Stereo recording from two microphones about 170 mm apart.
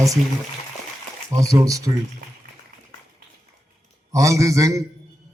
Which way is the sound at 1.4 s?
20° right (ahead or behind).